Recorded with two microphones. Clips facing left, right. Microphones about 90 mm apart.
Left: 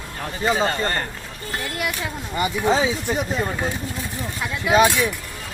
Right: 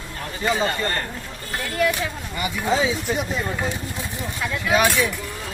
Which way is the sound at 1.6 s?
15° left (ahead or behind).